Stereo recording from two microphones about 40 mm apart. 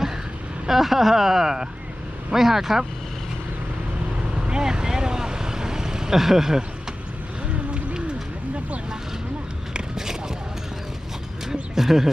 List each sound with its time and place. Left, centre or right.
0.7 s speech: centre
4.4 s vehicle: right; by 6.6 s centre
9.7 s a sound: centre
11.7 s speech: centre